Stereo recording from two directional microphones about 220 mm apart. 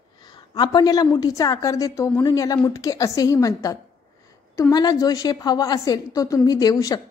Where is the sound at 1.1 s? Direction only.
15° left (ahead or behind).